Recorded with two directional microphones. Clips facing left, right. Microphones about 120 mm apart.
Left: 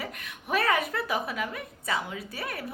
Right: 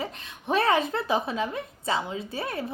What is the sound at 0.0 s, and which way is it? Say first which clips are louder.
A woman's voice: right 4 dB; 25° right (ahead or behind).